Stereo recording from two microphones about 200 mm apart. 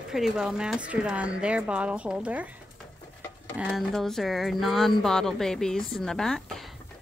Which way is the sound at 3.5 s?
5° right (ahead or behind).